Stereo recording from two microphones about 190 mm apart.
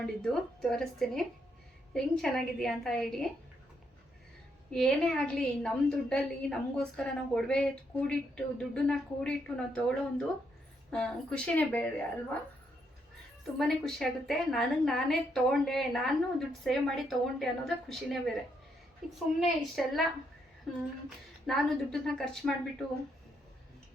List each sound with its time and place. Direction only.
0.0 s a woman's voice: 5° left (ahead or behind)
4.7 s a woman's voice: 5° left (ahead or behind)
13.6 s a woman's voice: centre (ahead or behind)